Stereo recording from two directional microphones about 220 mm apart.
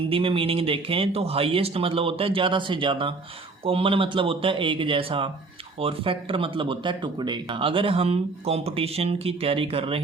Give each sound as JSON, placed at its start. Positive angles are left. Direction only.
{"t": 0.0, "sound": "speech", "side_deg": -25}